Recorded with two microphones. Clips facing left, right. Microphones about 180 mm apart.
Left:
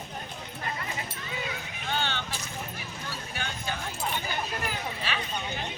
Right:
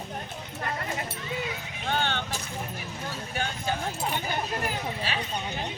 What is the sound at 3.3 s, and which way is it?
Clip-clop, 45° right (ahead or behind).